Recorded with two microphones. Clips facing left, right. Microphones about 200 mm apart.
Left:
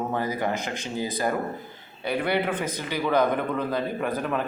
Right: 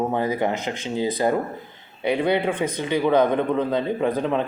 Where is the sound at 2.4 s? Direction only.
30° right (ahead or behind).